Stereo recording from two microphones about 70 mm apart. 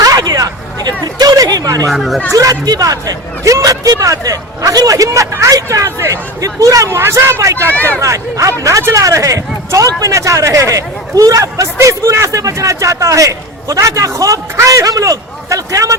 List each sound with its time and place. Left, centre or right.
0.0 s a sound: right
1.9 s speech: centre
2.3 s speech: right
7.7 s speech: left
7.9 s speech: right